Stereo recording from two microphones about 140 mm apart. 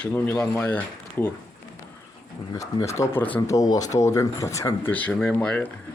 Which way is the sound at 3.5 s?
25° left (ahead or behind).